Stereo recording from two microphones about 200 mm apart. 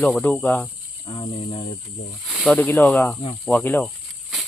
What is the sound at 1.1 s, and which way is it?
Cricket, 25° left (ahead or behind).